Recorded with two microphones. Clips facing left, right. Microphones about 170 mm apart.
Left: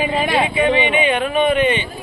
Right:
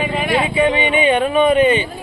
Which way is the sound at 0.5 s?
30° right (ahead or behind).